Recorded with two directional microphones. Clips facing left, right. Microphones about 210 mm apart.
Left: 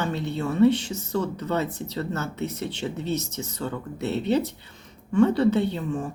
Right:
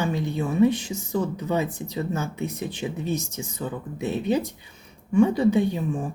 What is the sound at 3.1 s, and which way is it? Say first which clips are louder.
Speech: left 1 dB; 65° left (ahead or behind).